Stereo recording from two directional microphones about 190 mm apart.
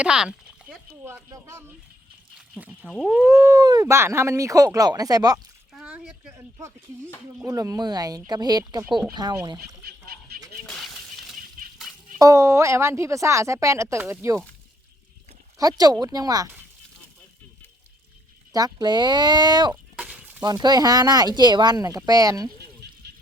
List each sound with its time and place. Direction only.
0.0 s speech: 5° right (ahead or behind)
5.7 s a sound: 5° right (ahead or behind)
6.3 s speech: 15° right (ahead or behind)
9.8 s goose: 50° right (ahead or behind)
10.7 s breaking: centre (ahead or behind)
12.2 s speech: 15° right (ahead or behind)
15.5 s speech: 20° right (ahead or behind)
18.5 s speech: 20° right (ahead or behind)
19.7 s a sound: 5° right (ahead or behind)
20.4 s speech: 20° right (ahead or behind)
22.8 s a sound: 60° right (ahead or behind)